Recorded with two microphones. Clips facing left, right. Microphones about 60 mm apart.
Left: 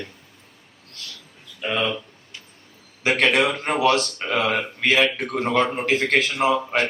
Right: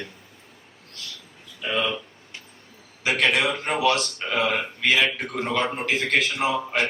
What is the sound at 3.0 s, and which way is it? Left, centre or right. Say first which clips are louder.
A man's voice: left 3 dB; left.